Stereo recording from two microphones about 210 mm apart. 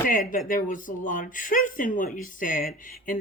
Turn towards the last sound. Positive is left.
turn(degrees=40)  # may be behind; listen again after turning